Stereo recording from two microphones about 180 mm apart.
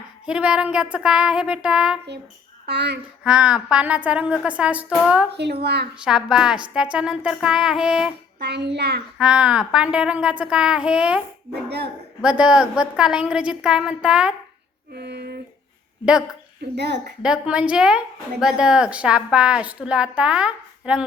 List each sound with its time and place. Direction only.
0.3 s a woman's voice: 5° right (ahead or behind)
2.6 s speech: 70° right (ahead or behind)
3.2 s a woman's voice: 5° right (ahead or behind)
5.3 s speech: 65° right (ahead or behind)
6.1 s a woman's voice: 5° right (ahead or behind)
8.4 s speech: 70° right (ahead or behind)
9.1 s a woman's voice: 5° right (ahead or behind)
12.2 s a woman's voice: 5° right (ahead or behind)
14.9 s a sound: 65° right (ahead or behind)
16.7 s speech: 70° right (ahead or behind)
17.2 s a woman's voice: 5° right (ahead or behind)